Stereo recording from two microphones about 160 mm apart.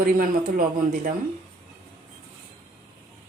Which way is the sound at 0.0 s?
65° right (ahead or behind).